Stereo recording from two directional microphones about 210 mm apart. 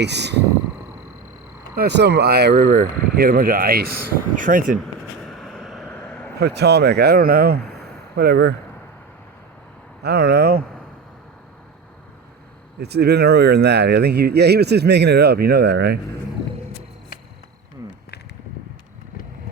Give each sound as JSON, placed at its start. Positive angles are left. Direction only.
{"t": 0.0, "sound": "speech", "side_deg": -55}
{"t": 1.7, "sound": "speech", "side_deg": -50}
{"t": 5.2, "sound": "a sound", "side_deg": 0}
{"t": 6.4, "sound": "speech", "side_deg": -50}
{"t": 10.0, "sound": "speech", "side_deg": -50}
{"t": 12.8, "sound": "speech", "side_deg": -50}